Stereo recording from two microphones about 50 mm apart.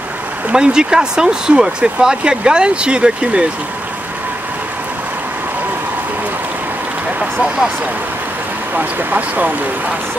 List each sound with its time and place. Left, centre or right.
0.5 s speech: centre
8.7 s speech: right